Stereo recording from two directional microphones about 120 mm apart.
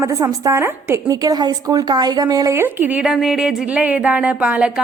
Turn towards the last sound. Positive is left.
turn(degrees=-10)  # may be behind; listen again after turning